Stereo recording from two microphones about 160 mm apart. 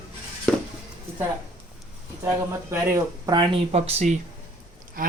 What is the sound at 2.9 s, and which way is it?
Speech, 20° right (ahead or behind).